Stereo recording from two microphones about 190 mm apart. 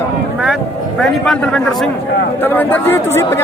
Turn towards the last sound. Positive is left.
turn(degrees=15)  # may be behind; listen again after turning